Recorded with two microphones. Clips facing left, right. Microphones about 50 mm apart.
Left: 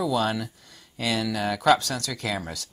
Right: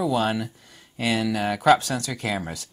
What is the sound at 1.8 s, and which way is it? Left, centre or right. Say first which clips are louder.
Speech: right 2 dB; right.